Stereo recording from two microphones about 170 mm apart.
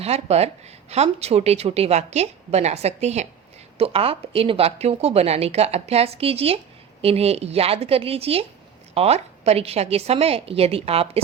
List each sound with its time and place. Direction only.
0.0 s a woman's voice: 40° right (ahead or behind)